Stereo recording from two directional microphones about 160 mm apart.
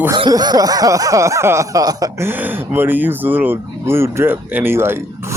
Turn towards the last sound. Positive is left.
turn(degrees=-15)  # may be behind; listen again after turning